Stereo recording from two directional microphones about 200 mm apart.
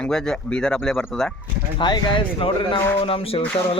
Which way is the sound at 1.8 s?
25° left (ahead or behind).